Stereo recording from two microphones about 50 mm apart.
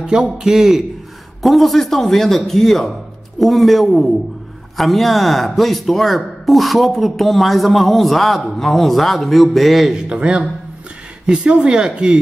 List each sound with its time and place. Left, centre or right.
0.0 s speech: centre
1.4 s speech: centre
9.9 s speech: centre